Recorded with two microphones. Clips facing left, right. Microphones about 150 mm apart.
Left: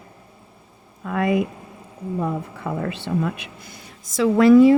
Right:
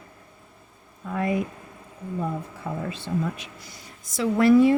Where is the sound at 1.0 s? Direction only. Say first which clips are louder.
Left 5 dB; 85° left.